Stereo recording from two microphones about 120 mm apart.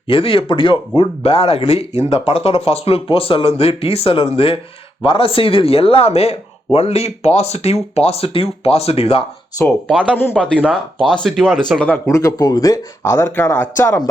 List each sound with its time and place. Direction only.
0.1 s speech: 50° left (ahead or behind)
10.1 s speech: 15° left (ahead or behind)
12.0 s speech: 25° left (ahead or behind)